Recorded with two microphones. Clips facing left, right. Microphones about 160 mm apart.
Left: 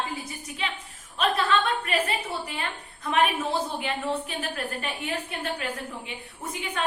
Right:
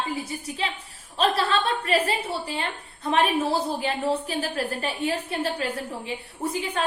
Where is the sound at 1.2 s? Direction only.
35° right (ahead or behind).